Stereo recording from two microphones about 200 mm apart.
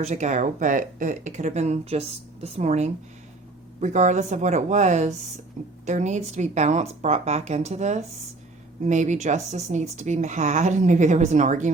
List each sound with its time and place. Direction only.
0.0 s speech: 35° right (ahead or behind)